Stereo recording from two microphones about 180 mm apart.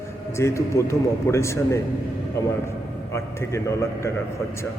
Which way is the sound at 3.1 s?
15° left (ahead or behind).